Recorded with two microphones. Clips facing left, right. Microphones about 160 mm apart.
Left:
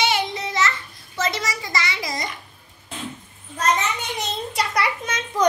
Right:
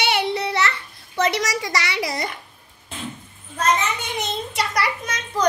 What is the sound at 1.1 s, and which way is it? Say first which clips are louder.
A child's voice: right 4 dB; 70° right (ahead or behind).